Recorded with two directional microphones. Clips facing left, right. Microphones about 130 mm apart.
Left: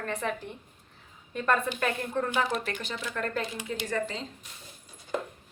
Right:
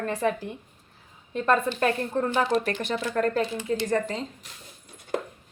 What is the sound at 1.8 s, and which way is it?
A woman's voice, 35° right (ahead or behind).